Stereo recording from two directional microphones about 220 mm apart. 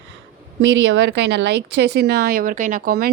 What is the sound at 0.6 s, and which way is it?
Speech, 55° right (ahead or behind).